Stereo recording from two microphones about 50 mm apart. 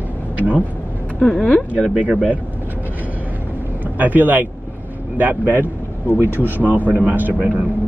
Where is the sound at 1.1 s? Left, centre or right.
Centre.